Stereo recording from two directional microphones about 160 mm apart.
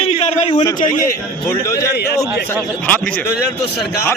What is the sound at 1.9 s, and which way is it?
Speech, 90° left.